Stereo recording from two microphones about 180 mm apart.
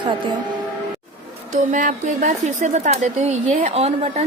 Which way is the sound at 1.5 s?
45° right (ahead or behind).